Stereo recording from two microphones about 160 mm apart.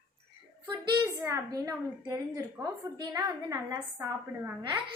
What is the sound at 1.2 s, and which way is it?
A woman's voice, 20° right (ahead or behind).